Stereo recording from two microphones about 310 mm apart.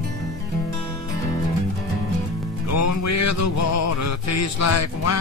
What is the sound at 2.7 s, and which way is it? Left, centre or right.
Music, left.